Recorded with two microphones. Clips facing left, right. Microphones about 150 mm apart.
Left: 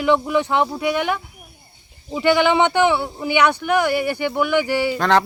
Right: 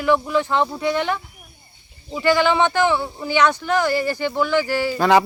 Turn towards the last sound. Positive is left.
turn(degrees=-10)  # may be behind; listen again after turning